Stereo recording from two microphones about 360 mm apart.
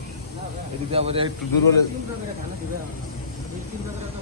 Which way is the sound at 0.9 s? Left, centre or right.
Centre.